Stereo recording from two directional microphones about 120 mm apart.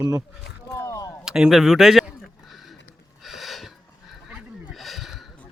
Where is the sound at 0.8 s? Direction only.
25° left (ahead or behind).